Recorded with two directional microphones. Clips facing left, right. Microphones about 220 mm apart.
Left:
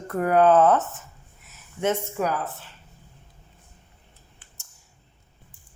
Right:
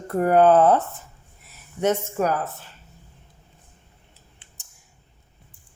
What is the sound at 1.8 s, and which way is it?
Speech, 45° right (ahead or behind).